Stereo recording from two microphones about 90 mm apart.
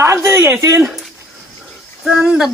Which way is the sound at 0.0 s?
30° right (ahead or behind).